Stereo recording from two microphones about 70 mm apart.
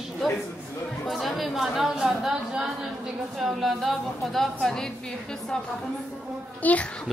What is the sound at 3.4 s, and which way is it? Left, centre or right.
A woman's voice, centre.